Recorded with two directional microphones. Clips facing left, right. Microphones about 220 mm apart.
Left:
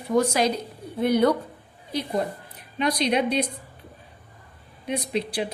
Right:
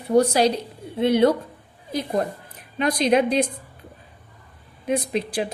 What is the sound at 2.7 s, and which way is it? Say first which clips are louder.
Speech: right 4 dB; 50° right (ahead or behind).